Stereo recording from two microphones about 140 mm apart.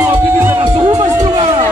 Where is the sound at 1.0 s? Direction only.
30° right (ahead or behind).